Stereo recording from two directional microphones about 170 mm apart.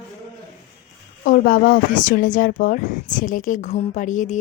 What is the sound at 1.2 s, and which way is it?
A woman's voice, 55° left (ahead or behind).